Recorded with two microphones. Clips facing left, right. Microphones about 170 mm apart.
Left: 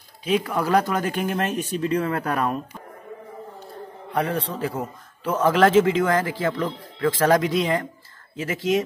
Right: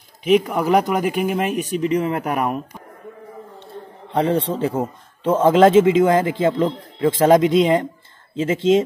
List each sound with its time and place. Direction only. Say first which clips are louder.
0.3 s speech: right 5 dB; 15° right (ahead or behind)
4.1 s a man's voice: right 6 dB; 25° right (ahead or behind)